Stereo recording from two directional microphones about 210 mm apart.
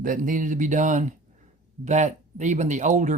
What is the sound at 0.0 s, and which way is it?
Speech, 40° right (ahead or behind).